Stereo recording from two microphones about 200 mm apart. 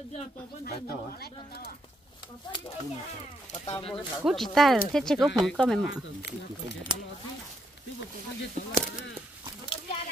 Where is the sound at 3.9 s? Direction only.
Centre (ahead or behind).